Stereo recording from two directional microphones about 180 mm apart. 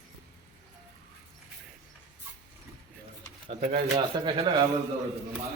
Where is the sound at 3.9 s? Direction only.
25° right (ahead or behind).